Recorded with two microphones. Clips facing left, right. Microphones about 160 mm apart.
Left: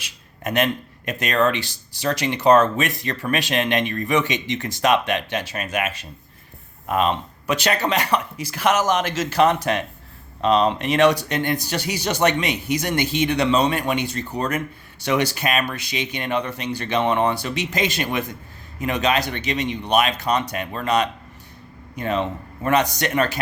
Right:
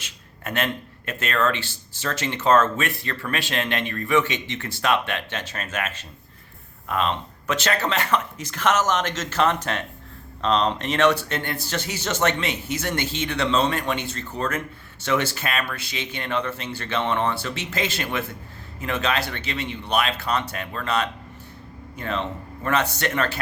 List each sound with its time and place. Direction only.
0.0 s speech: 15° left (ahead or behind)